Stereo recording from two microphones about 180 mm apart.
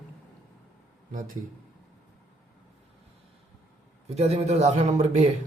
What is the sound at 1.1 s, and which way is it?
Speech, 50° right (ahead or behind).